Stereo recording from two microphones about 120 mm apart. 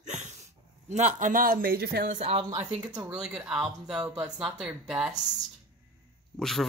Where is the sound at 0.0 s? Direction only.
80° right.